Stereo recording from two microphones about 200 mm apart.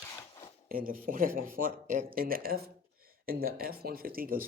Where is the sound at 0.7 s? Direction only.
45° right (ahead or behind).